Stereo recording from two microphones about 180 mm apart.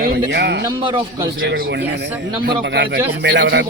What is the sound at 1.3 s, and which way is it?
A man's voice, 55° right (ahead or behind).